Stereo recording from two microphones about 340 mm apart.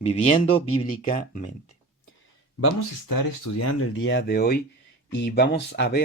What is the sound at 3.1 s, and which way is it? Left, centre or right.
Speech, left.